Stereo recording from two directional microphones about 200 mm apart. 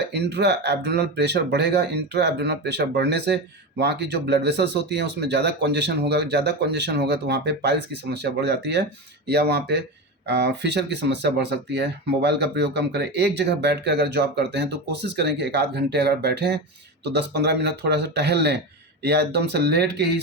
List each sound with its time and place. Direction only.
0.1 s speech: 55° right (ahead or behind)